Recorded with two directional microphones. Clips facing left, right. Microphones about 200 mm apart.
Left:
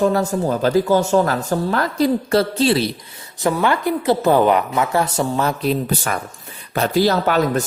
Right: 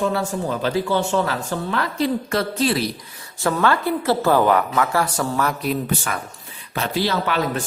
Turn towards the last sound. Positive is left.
turn(degrees=45)  # may be behind; listen again after turning